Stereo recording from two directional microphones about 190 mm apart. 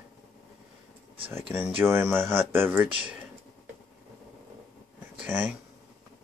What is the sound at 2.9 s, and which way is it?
Speech, 25° right (ahead or behind).